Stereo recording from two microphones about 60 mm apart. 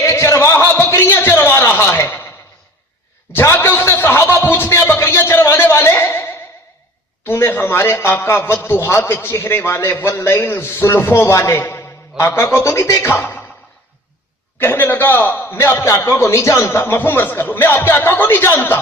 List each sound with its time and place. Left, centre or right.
0.1 s a sound: left
3.3 s music: left
7.3 s a sound: left
8.2 s a man's voice: left
13.0 s a man's voice: left
14.6 s a man's voice: left
16.9 s a man's voice: left